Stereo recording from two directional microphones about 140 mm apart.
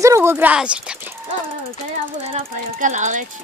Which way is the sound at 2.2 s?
50° right (ahead or behind).